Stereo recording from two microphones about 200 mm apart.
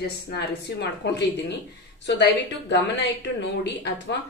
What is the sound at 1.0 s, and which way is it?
A woman's voice, 60° left (ahead or behind).